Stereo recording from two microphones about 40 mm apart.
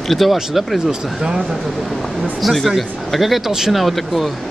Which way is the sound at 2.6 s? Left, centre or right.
Centre.